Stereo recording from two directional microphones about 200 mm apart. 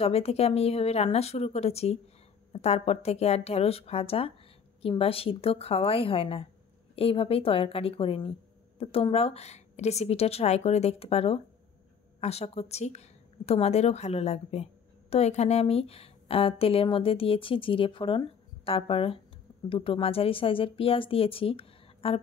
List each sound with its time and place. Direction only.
0.0 s a woman's voice: 30° left (ahead or behind)